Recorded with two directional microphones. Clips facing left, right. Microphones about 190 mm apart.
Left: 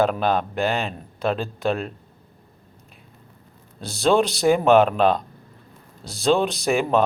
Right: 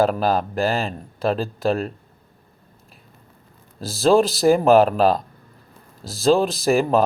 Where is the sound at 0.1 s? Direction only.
5° right (ahead or behind).